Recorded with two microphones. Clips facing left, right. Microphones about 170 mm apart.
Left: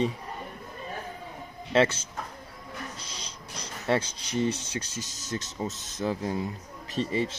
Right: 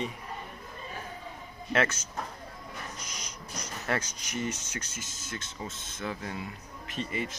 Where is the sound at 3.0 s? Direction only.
30° left (ahead or behind).